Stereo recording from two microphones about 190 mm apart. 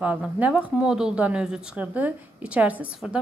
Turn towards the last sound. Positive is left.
turn(degrees=-5)  # may be behind; listen again after turning